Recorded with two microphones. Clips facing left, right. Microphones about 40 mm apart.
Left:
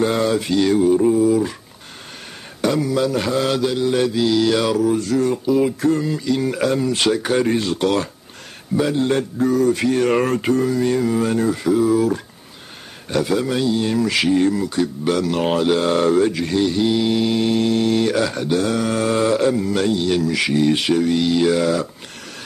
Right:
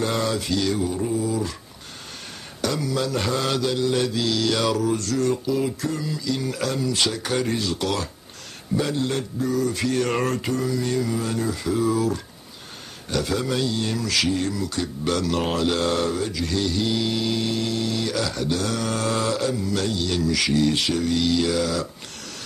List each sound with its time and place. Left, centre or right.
0.0 s mantra: centre
2.6 s mantra: left
5.8 s speech: left
6.2 s mantra: left
7.5 s speech: left
8.9 s mantra: left
9.4 s speech: left
9.8 s mantra: centre
11.7 s mantra: centre
13.1 s mantra: centre
14.8 s mantra: centre
16.0 s speech: left
16.5 s mantra: left